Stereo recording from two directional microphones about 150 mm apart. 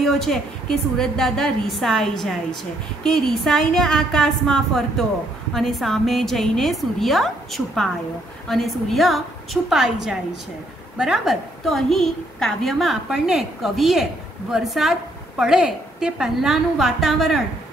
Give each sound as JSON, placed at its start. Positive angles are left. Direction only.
{"t": 0.0, "sound": "a woman's voice", "side_deg": 0}